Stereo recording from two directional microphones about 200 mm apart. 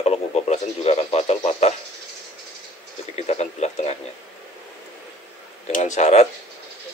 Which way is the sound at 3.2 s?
35° left (ahead or behind).